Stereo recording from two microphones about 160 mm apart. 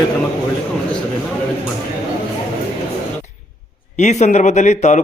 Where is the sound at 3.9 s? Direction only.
50° left (ahead or behind).